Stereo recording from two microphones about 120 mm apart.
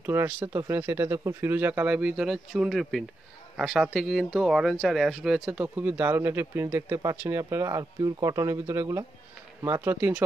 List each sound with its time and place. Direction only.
0.0 s speech: 20° right (ahead or behind)